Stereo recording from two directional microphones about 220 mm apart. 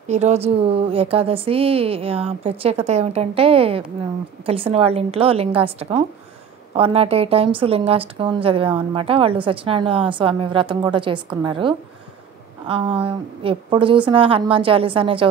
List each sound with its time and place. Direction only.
0.1 s a woman's voice: 30° right (ahead or behind)